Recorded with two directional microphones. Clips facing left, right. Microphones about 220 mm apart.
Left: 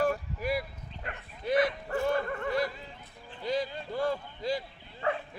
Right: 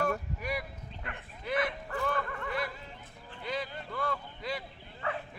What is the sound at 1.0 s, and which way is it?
Bow-wow, 30° left (ahead or behind).